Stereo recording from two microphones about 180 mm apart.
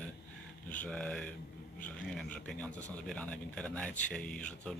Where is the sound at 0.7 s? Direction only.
5° left (ahead or behind).